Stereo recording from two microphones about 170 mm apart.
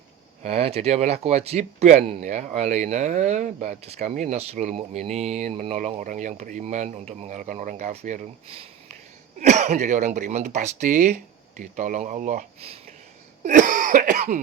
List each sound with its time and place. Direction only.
0.4 s speech: 35° right (ahead or behind)
9.4 s speech: 45° right (ahead or behind)
13.4 s cough: 50° right (ahead or behind)